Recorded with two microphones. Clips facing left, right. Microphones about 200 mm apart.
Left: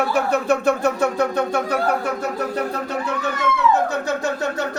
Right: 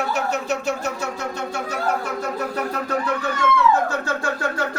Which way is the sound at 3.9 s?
20° left (ahead or behind).